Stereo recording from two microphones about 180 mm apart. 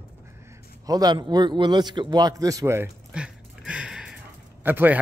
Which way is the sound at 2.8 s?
5° right (ahead or behind).